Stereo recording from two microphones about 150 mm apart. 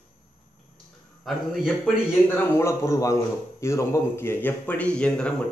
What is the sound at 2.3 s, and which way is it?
A man's voice, 15° left (ahead or behind).